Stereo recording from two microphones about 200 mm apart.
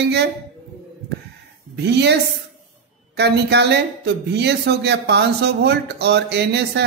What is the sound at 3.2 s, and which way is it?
Speech, 55° right (ahead or behind).